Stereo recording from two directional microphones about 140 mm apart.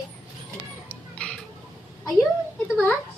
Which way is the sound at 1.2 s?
10° left (ahead or behind).